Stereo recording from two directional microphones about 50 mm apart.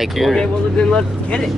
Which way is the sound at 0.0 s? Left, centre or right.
Centre.